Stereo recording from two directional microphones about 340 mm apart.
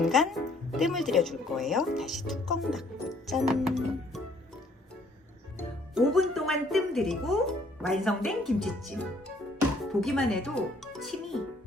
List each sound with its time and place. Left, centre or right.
0.0 s speech: centre
5.5 s speech: centre